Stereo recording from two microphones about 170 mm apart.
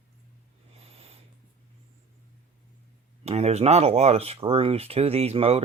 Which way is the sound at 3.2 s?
40° right (ahead or behind).